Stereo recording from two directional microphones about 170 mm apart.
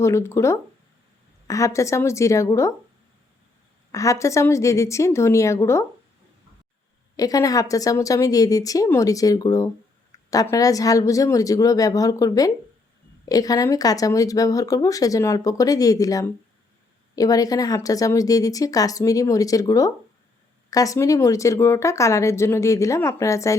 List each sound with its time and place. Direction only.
0.0 s speech: 15° left (ahead or behind)
3.9 s speech: 20° left (ahead or behind)
7.2 s speech: 20° left (ahead or behind)
10.1 s a sound: 20° left (ahead or behind)
10.5 s speech: 20° left (ahead or behind)